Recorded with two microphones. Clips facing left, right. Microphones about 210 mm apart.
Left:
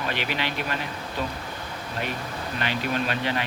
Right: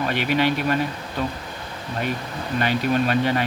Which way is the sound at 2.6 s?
45° right (ahead or behind).